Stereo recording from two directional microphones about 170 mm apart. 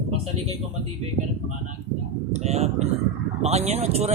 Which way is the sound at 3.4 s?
40° right (ahead or behind).